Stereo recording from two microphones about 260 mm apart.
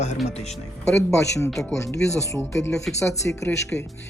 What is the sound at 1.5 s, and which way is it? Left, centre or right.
Speech, centre.